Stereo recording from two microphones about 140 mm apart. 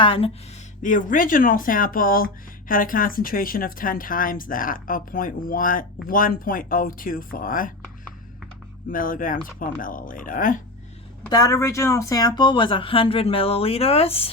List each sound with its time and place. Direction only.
0.0 s speech: 40° left (ahead or behind)
0.8 s speech: 65° left (ahead or behind)
8.9 s speech: 80° left
11.3 s speech: 25° left (ahead or behind); by 14.3 s 45° left (ahead or behind)